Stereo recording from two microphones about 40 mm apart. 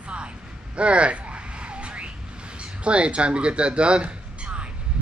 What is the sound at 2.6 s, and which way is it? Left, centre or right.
Speech, right.